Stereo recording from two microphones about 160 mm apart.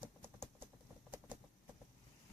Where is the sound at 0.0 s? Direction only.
15° right (ahead or behind).